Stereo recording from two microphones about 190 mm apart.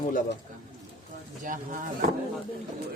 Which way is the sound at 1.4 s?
45° right (ahead or behind).